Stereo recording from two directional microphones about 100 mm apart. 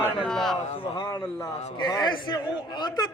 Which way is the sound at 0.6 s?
70° left (ahead or behind).